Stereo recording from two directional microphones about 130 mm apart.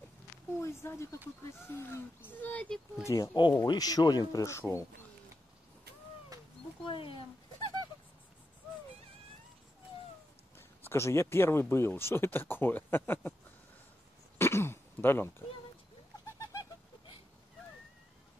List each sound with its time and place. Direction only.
0.6 s speech: 20° left (ahead or behind)
3.1 s speech: 35° left (ahead or behind)
6.8 s speech: 40° left (ahead or behind)
10.8 s speech: 20° left (ahead or behind)
14.4 s throat clearing: 20° left (ahead or behind)